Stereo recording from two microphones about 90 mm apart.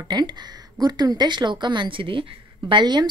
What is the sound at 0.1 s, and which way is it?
A woman's voice, 55° right (ahead or behind).